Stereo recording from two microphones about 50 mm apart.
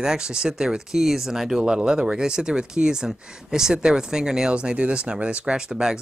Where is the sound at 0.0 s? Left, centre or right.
Centre.